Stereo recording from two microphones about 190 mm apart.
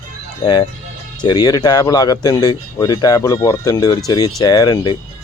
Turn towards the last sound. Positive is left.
turn(degrees=25)  # may be behind; listen again after turning